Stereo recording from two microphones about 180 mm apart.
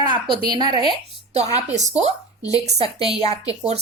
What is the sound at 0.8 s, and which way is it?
A woman's voice, 35° right (ahead or behind).